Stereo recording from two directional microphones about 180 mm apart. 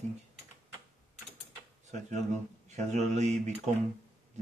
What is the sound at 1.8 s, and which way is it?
Speech, 40° right (ahead or behind).